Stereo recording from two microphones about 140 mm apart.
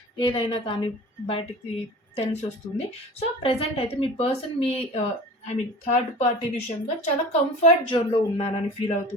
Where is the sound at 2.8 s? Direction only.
50° left (ahead or behind).